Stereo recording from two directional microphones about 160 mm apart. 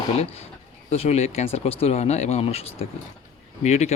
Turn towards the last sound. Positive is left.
turn(degrees=45)  # may be behind; listen again after turning